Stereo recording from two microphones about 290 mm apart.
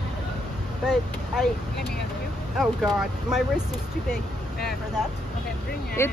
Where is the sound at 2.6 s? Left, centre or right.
Centre.